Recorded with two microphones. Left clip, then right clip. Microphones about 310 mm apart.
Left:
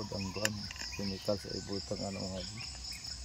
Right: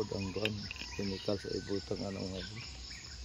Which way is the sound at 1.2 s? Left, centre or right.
Centre.